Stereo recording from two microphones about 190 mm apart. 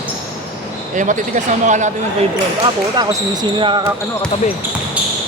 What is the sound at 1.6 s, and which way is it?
Speech, 40° right (ahead or behind).